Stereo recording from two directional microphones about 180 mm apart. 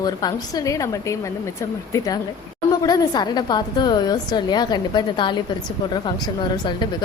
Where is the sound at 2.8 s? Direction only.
20° left (ahead or behind).